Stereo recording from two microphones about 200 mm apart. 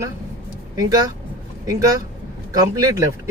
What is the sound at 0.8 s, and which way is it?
Speech, 15° right (ahead or behind).